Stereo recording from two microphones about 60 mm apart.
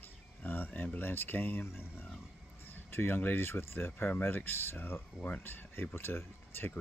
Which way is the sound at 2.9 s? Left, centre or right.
Left.